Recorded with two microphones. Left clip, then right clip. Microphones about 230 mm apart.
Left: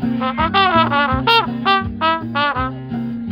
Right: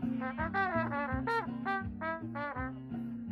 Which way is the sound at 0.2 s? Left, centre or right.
Centre.